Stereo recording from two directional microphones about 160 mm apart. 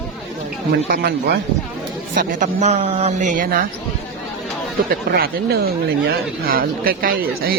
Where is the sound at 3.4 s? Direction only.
60° right (ahead or behind).